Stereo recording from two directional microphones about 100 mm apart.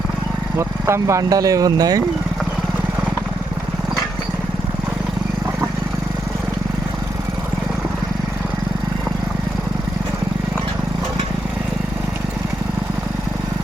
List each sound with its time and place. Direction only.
0.9 s speech: 30° right (ahead or behind)